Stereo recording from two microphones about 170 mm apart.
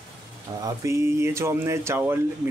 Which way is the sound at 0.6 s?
15° right (ahead or behind).